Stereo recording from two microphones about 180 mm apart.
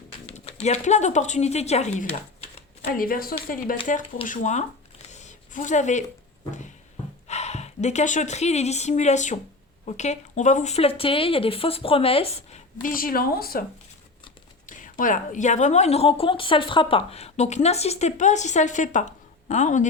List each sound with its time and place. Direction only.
0.3 s a woman's voice: 35° left (ahead or behind)
2.8 s speech: 50° left (ahead or behind)
4.3 s a woman's voice: 40° left (ahead or behind)
5.1 s a sound: 40° left (ahead or behind)
7.3 s a woman's voice: 40° left (ahead or behind); by 13.7 s 55° left (ahead or behind)
14.7 s a woman's voice: 50° left (ahead or behind)